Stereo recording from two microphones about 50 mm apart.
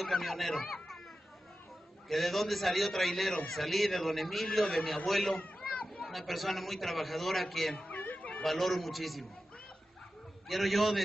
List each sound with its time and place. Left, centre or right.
0.0 s a man's voice: centre
2.0 s a man's voice: centre
5.6 s children playing: centre
6.0 s a man's voice: centre
7.8 s a sound: left
8.4 s a man's voice: centre
10.5 s a man's voice: centre